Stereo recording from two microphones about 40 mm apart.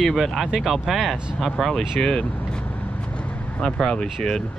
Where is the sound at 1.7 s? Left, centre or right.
Centre.